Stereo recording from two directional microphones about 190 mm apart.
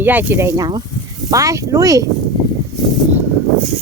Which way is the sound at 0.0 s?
10° right (ahead or behind).